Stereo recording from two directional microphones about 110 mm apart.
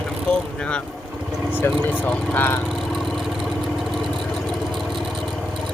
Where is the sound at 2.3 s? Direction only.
20° left (ahead or behind).